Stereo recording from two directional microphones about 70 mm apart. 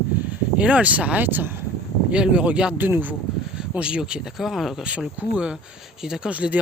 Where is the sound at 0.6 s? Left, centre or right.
Centre.